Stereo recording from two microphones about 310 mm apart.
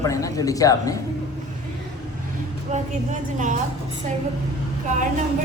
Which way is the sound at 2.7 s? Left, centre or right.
Right.